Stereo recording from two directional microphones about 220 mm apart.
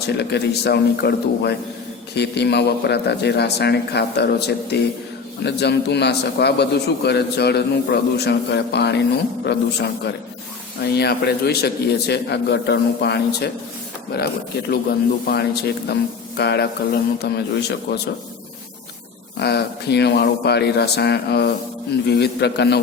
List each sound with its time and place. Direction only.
0.0 s a man's voice: 50° left (ahead or behind)
10.9 s a man's voice: 50° left (ahead or behind)
14.7 s a man's voice: 45° left (ahead or behind)
19.4 s a man's voice: 50° left (ahead or behind)